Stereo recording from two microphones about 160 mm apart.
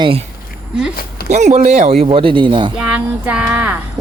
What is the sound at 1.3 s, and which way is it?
Speech, 45° right (ahead or behind).